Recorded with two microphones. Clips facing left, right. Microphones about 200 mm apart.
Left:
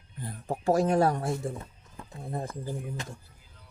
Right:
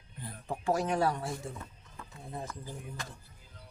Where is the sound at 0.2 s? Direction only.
45° left (ahead or behind).